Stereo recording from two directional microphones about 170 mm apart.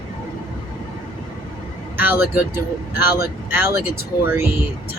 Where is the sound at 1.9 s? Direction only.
10° right (ahead or behind).